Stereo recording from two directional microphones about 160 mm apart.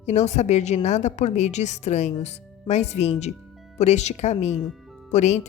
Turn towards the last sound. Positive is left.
turn(degrees=45)  # may be behind; listen again after turning